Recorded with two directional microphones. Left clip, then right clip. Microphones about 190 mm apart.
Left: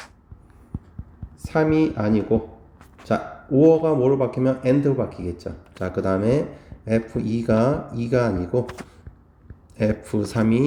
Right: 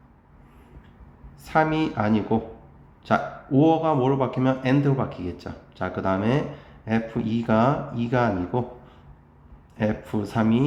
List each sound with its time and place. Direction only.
1.5 s a man's voice: 30° left (ahead or behind)
9.7 s a man's voice: 40° left (ahead or behind)